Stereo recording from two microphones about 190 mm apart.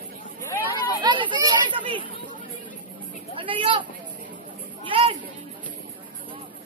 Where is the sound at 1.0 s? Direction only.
25° right (ahead or behind).